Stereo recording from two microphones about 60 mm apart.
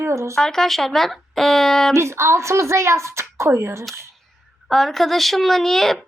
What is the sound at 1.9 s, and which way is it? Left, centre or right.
Speech, right.